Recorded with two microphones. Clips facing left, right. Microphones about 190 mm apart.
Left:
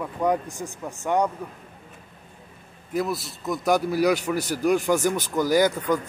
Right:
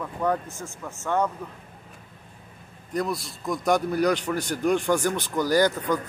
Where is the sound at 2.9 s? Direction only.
5° left (ahead or behind).